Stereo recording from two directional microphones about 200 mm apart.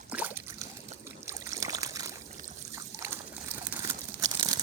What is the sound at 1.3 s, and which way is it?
Boat, 15° right (ahead or behind).